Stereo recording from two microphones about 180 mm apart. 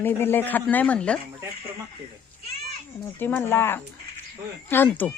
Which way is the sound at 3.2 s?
10° left (ahead or behind).